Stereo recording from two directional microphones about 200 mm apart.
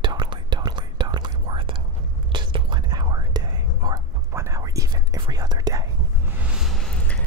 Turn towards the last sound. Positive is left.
turn(degrees=5)  # may be behind; listen again after turning